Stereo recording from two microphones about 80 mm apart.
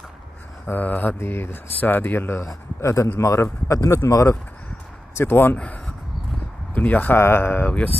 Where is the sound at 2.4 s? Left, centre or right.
Left.